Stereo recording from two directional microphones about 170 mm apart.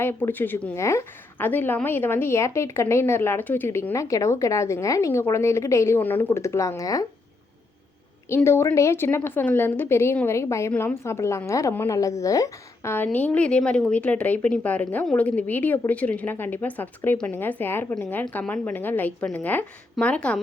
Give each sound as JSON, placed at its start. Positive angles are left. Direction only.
{"t": 0.0, "sound": "a woman's voice", "side_deg": 10}
{"t": 8.4, "sound": "a woman's voice", "side_deg": 15}